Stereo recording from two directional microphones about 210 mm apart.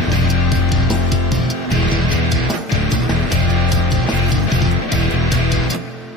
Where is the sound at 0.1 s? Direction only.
Centre (ahead or behind).